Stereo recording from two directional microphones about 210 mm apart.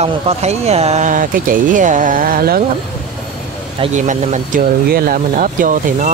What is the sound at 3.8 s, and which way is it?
Speech, 35° right (ahead or behind).